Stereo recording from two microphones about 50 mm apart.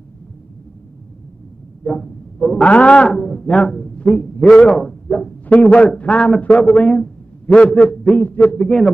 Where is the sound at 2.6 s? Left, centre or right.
Left.